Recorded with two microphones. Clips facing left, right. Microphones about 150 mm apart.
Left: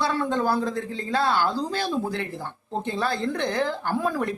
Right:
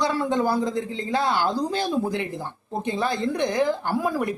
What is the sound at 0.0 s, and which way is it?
Speech, 15° right (ahead or behind).